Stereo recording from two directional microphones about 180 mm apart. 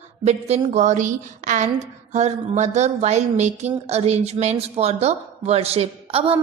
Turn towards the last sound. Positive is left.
turn(degrees=-35)  # may be behind; listen again after turning